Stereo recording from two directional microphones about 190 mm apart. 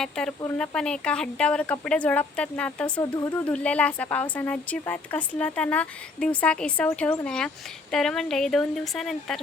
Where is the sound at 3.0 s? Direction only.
15° left (ahead or behind).